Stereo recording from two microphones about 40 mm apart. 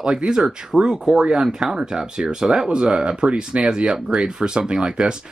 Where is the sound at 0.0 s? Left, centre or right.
Right.